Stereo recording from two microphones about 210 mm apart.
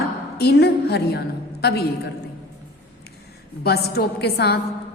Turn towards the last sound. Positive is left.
turn(degrees=50)  # may be behind; listen again after turning